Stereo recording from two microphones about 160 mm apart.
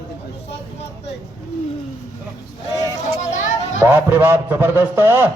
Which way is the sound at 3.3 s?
50° left (ahead or behind).